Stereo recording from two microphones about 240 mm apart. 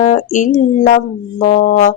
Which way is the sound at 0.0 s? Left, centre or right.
Left.